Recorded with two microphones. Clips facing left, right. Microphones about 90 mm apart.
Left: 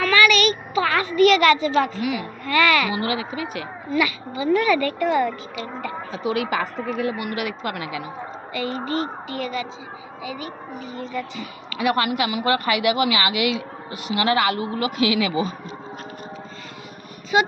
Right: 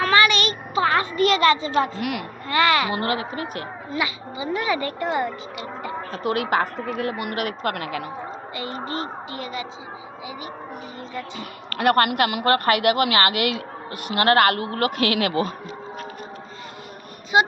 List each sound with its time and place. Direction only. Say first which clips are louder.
0.0 s a sound: left 1 dB; 30° right (ahead or behind)
2.0 s a child's voice: left 2 dB; 75° right (ahead or behind)
2.5 s speech: left 1 dB; 25° right (ahead or behind)
2.9 s a woman's voice: even; 45° right (ahead or behind)
3.9 s speech: left 5 dB; 20° right (ahead or behind)
6.1 s a woman's voice: right 1 dB; 50° right (ahead or behind)
8.5 s speech: left 5 dB; 25° right (ahead or behind)
11.7 s a woman's voice: right 3 dB; 55° right (ahead or behind)